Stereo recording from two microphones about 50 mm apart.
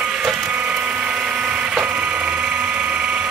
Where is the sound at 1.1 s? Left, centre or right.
Centre.